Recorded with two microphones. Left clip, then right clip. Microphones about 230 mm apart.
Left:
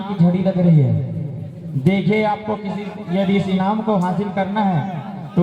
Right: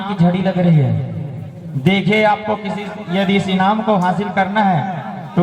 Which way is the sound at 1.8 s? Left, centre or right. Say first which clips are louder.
Right 4 dB; centre.